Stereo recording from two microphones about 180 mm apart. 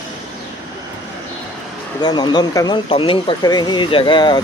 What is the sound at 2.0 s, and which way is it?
Speech, 25° left (ahead or behind).